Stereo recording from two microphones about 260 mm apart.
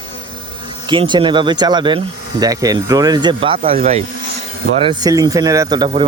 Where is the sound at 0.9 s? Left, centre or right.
Centre.